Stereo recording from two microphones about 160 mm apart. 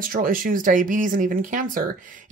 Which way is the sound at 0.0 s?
60° right (ahead or behind).